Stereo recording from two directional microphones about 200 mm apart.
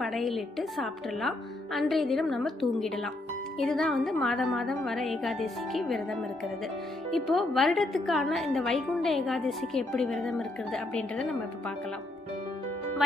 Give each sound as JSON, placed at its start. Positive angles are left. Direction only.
{"t": 0.0, "sound": "a woman's voice", "side_deg": 0}